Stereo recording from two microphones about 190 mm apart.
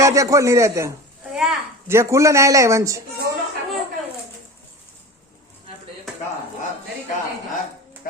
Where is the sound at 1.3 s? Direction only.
Centre (ahead or behind).